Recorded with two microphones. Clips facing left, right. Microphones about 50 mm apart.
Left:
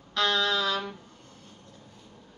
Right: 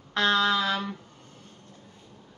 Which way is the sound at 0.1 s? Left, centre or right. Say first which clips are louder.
Right 3 dB; right.